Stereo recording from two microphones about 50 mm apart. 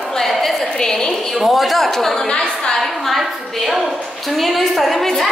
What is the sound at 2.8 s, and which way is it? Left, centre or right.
A woman's voice, centre.